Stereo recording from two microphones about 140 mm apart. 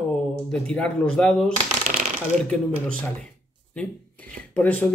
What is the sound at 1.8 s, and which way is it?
Shuffling cards, 60° right (ahead or behind).